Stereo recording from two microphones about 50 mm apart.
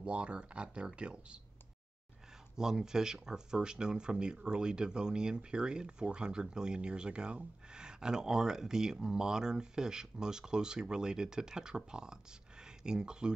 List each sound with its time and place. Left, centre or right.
0.0 s speech: right
2.5 s speech: centre